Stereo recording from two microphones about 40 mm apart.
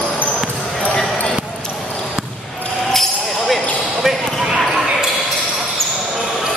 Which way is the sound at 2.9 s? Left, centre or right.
Centre.